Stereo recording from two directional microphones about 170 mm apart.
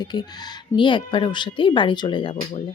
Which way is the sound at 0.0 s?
25° left (ahead or behind).